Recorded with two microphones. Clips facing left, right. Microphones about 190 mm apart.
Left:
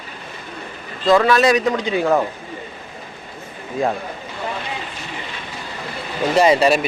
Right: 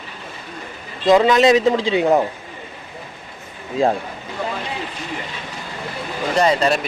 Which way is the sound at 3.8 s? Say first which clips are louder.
Right 3 dB; 25° right (ahead or behind).